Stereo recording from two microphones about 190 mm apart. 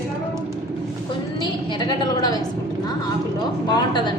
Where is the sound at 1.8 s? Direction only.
20° left (ahead or behind).